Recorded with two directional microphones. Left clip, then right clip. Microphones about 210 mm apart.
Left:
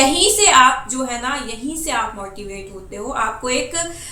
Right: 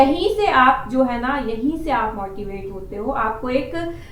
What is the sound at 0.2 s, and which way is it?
A woman's voice, 5° left (ahead or behind).